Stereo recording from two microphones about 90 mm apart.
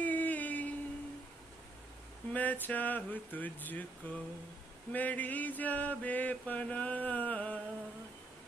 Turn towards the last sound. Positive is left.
turn(degrees=15)  # may be behind; listen again after turning